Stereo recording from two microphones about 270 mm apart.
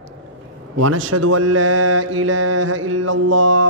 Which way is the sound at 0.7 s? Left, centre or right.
Right.